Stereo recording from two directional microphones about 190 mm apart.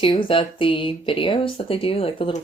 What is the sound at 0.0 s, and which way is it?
Speech, 25° left (ahead or behind).